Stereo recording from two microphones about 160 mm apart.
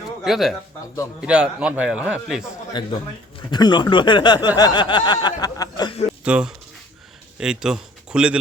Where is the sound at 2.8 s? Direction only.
30° left (ahead or behind).